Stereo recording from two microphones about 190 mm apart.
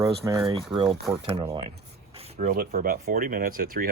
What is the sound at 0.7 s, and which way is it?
Speech, 25° right (ahead or behind).